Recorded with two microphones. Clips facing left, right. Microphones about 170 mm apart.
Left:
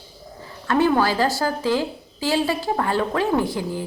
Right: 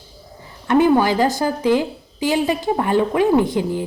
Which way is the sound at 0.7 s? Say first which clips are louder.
Right 4 dB; 15° right (ahead or behind).